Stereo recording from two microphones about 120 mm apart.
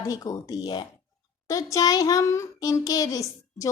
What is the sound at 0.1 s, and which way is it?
A child's voice, 30° left (ahead or behind).